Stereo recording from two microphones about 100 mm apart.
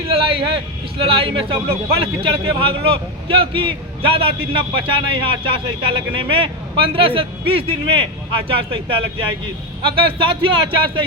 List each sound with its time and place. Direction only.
0.1 s a man's voice: 65° right (ahead or behind)